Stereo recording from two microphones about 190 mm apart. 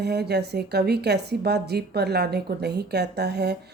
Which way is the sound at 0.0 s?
60° right (ahead or behind).